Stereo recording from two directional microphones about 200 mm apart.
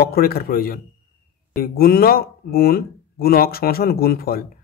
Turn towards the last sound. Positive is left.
turn(degrees=50)  # may be behind; listen again after turning